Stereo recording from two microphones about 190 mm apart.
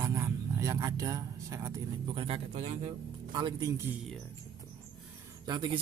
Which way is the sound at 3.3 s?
20° right (ahead or behind).